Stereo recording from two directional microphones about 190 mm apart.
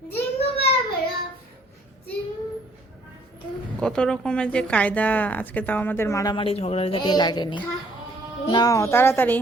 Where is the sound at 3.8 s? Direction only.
5° left (ahead or behind).